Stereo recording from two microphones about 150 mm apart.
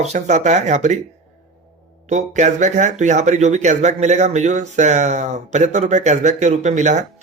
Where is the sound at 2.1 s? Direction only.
50° right (ahead or behind).